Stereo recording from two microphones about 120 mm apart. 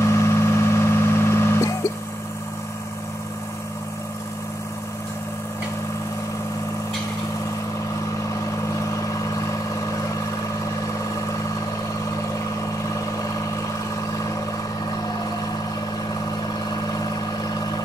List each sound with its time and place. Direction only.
0.0 s vehicle: 25° left (ahead or behind)